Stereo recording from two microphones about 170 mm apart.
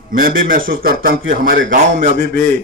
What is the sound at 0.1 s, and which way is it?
A man's voice, 55° right (ahead or behind).